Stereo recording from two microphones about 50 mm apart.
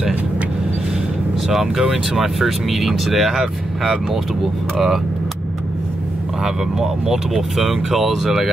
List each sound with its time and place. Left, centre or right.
1.5 s speech: centre
6.4 s speech: centre